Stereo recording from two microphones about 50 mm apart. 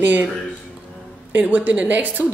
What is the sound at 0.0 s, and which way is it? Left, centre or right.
Speech, right.